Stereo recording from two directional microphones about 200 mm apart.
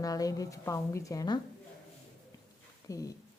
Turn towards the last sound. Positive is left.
turn(degrees=15)  # may be behind; listen again after turning